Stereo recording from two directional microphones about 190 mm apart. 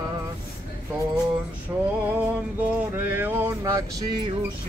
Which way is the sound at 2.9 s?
10° right (ahead or behind).